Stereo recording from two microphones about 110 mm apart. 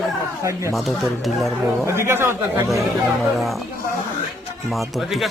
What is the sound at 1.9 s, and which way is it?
Speech, 25° right (ahead or behind).